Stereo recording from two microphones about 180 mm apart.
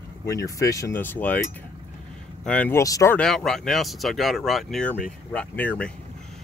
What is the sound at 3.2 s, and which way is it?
Speech, centre (ahead or behind).